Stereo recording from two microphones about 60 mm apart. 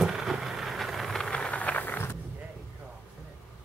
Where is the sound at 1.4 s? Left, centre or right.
Left.